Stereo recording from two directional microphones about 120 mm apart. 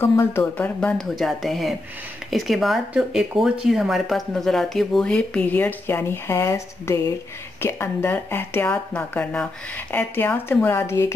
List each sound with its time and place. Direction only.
0.0 s speech: 20° left (ahead or behind)
0.7 s speech: 5° left (ahead or behind); by 11.1 s 20° left (ahead or behind)